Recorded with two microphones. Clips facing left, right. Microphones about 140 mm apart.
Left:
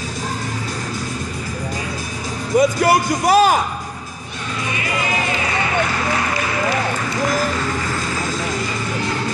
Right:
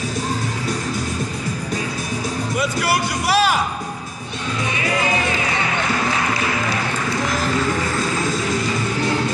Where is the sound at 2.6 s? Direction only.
45° left (ahead or behind).